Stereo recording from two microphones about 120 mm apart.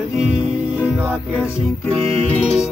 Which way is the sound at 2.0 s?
60° right (ahead or behind).